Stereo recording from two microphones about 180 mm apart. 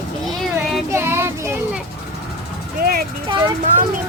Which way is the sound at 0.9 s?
15° right (ahead or behind).